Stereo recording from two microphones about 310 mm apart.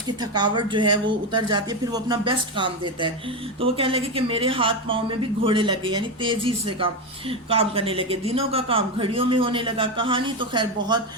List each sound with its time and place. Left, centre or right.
0.2 s speech: centre